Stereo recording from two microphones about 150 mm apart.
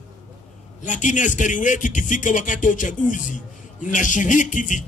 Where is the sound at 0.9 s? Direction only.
55° left (ahead or behind).